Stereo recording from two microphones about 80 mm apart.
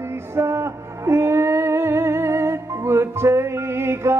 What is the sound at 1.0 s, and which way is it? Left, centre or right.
Music, right.